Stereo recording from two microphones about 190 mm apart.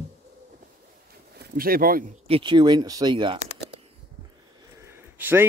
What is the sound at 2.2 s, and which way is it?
Speech, 25° right (ahead or behind).